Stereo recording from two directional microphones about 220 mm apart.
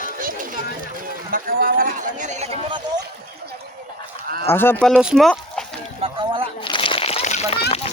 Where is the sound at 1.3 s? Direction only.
40° right (ahead or behind).